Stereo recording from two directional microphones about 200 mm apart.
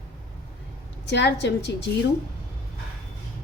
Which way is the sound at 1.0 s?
60° left (ahead or behind).